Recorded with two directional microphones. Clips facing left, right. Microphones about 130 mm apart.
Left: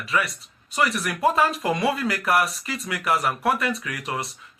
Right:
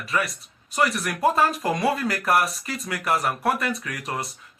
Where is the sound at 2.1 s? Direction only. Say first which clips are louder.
Even; 40° right (ahead or behind).